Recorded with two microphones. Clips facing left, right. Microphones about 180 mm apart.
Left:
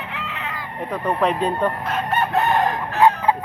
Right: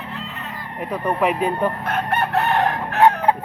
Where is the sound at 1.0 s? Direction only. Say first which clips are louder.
Even; 10° right (ahead or behind).